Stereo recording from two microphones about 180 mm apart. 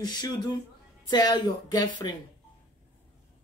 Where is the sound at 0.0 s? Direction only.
20° left (ahead or behind).